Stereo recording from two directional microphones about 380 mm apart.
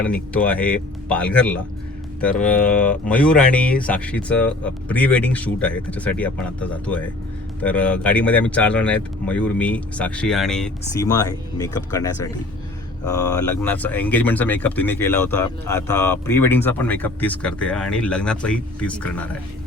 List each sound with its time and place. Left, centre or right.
0.0 s speech: centre
13.4 s speech: left
13.7 s speech: centre